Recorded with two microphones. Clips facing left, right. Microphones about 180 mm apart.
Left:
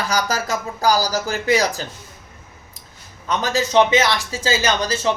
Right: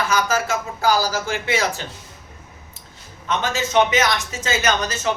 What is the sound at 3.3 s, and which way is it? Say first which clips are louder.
Speech: left 2 dB; 35° left (ahead or behind).